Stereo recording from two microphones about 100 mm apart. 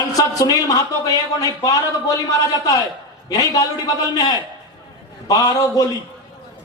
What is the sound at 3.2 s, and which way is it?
Speech, 40° left (ahead or behind).